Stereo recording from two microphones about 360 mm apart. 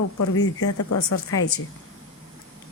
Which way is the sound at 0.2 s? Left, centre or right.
Left.